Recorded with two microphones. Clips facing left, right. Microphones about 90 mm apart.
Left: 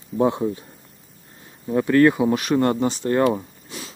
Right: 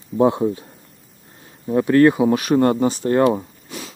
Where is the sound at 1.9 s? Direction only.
25° right (ahead or behind).